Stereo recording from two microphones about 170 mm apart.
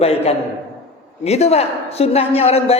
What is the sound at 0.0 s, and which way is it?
A woman's voice, 35° left (ahead or behind).